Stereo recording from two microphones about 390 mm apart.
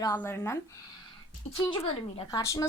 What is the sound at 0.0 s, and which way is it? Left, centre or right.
Speech, centre.